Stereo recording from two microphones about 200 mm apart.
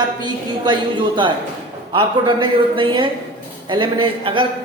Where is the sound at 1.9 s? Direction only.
25° right (ahead or behind).